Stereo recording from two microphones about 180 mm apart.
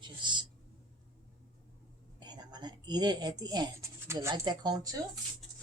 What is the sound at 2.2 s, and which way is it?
Speech, 25° right (ahead or behind).